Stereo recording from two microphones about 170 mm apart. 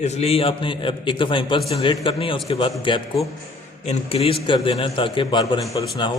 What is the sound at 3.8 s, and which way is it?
A man's voice, 40° left (ahead or behind).